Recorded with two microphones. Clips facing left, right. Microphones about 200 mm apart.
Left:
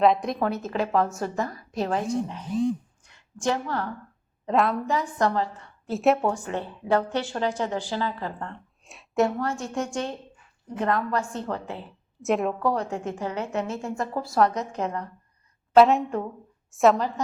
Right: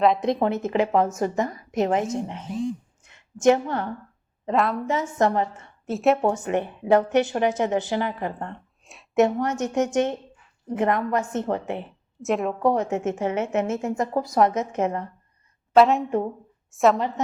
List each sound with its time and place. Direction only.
0.2 s a woman's voice: 20° right (ahead or behind)
3.0 s a sound: 20° right (ahead or behind)
4.4 s a woman's voice: centre (ahead or behind)
4.9 s a woman's voice: 25° right (ahead or behind)
5.9 s a woman's voice: centre (ahead or behind)
6.2 s a woman's voice: 20° right (ahead or behind)
12.2 s a woman's voice: centre (ahead or behind)
12.5 s a woman's voice: 20° right (ahead or behind)
15.7 s a woman's voice: centre (ahead or behind)
16.0 s a woman's voice: 25° right (ahead or behind)
16.7 s a woman's voice: centre (ahead or behind)
17.2 s a woman's voice: 20° right (ahead or behind)